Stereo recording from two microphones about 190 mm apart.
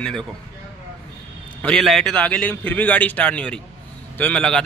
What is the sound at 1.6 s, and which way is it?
A man's voice, 5° left (ahead or behind).